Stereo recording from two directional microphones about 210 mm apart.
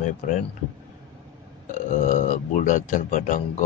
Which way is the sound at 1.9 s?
35° left (ahead or behind).